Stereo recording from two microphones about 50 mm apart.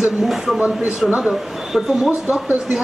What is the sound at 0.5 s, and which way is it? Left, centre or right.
Speech, centre.